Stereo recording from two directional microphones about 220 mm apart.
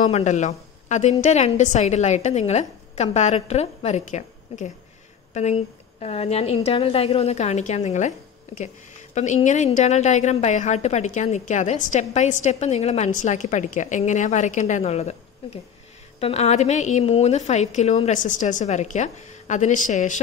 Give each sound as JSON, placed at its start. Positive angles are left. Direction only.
{"t": 0.0, "sound": "a woman's voice", "side_deg": 30}
{"t": 9.1, "sound": "a woman's voice", "side_deg": 35}
{"t": 16.2, "sound": "a woman's voice", "side_deg": 25}